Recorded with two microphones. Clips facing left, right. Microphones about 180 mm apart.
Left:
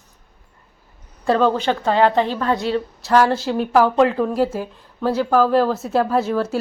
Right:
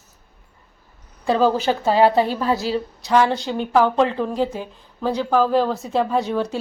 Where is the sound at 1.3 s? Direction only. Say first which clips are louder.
Left 1 dB; 5° right (ahead or behind).